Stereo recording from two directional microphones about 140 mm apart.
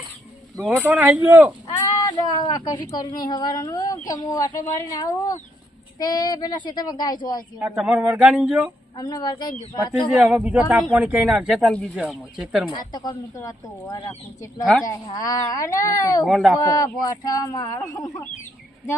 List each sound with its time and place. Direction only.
0.8 s speech: 10° right (ahead or behind)
1.6 s a child's voice: 30° left (ahead or behind)
7.6 s speech: 10° right (ahead or behind)
9.0 s speech: 30° left (ahead or behind)
10.1 s speech: 5° right (ahead or behind)
12.9 s a child's voice: 30° left (ahead or behind)
14.6 s speech: centre (ahead or behind)
14.8 s a child's voice: 25° left (ahead or behind)
16.2 s speech: centre (ahead or behind)
16.6 s a child's voice: 25° left (ahead or behind)